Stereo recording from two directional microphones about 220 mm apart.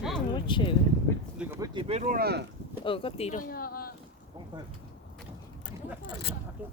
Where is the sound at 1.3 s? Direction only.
10° right (ahead or behind).